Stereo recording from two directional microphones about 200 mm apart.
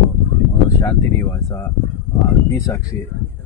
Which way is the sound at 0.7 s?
15° left (ahead or behind).